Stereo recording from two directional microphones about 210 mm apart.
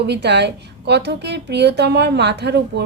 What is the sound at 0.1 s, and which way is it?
A woman's voice, 55° right (ahead or behind).